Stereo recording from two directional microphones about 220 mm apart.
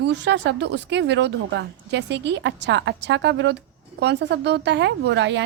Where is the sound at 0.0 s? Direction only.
50° right (ahead or behind).